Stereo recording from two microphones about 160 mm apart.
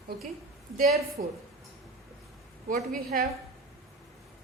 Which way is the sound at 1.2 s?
60° right (ahead or behind).